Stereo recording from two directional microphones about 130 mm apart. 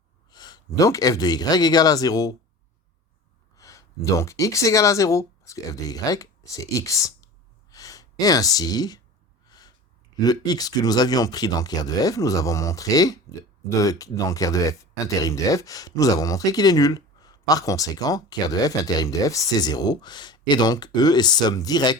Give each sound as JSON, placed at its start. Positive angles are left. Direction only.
{"t": 0.3, "sound": "speech", "side_deg": 30}
{"t": 3.5, "sound": "speech", "side_deg": 25}
{"t": 7.7, "sound": "gasp", "side_deg": 25}
{"t": 9.5, "sound": "snort", "side_deg": 30}
{"t": 10.2, "sound": "speech", "side_deg": 30}